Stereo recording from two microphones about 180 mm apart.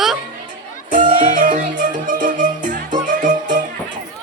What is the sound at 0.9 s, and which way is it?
Music, 45° right (ahead or behind).